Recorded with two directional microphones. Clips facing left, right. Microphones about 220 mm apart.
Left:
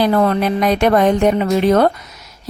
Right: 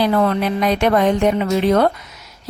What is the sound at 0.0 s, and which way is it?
A woman's voice, 40° left (ahead or behind).